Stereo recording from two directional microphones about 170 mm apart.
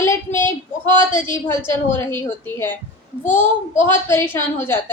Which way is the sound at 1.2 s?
15° left (ahead or behind).